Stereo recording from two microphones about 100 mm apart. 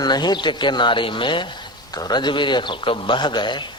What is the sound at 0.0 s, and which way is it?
A man's voice, 45° left (ahead or behind).